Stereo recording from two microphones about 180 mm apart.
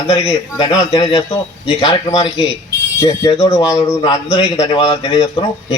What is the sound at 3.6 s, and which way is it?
Speech, 25° left (ahead or behind).